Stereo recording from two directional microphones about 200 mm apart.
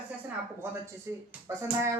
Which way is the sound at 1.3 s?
15° right (ahead or behind).